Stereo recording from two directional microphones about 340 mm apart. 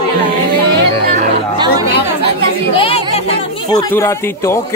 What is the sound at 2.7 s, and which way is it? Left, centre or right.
Speech, centre.